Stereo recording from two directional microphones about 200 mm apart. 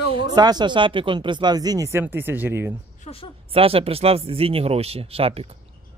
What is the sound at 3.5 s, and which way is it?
Speech, 30° right (ahead or behind).